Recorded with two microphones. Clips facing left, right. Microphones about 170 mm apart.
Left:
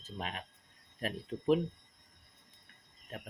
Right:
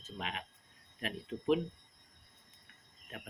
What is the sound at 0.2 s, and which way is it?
Speech, 40° left (ahead or behind).